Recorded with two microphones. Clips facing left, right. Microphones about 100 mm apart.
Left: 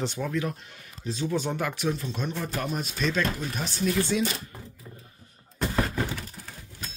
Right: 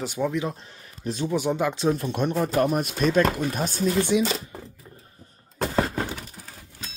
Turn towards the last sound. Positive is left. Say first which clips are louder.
# right 3 dB
turn(degrees=-30)  # may be behind; listen again after turning